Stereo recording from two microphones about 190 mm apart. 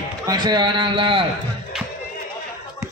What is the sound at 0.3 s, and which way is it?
Speech, 20° right (ahead or behind).